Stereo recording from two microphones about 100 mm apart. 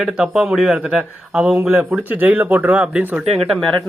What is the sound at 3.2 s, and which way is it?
Speech, 90° right.